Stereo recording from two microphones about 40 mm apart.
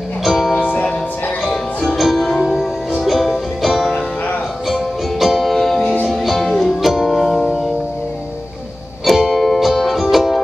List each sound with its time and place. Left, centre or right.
0.2 s music: centre
0.6 s music: left
2.0 s music: centre
9.0 s music: centre